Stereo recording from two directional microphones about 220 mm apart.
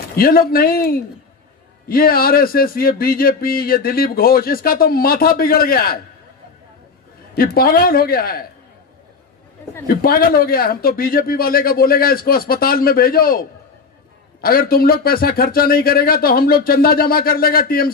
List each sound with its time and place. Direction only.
0.1 s speech: 40° left (ahead or behind)
7.3 s speech: 40° left (ahead or behind)
9.8 s speech: 40° left (ahead or behind)